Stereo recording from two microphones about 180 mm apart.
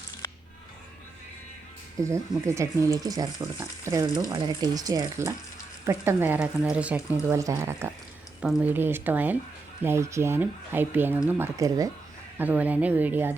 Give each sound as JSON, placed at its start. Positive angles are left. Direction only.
{"t": 2.0, "sound": "speech", "side_deg": -15}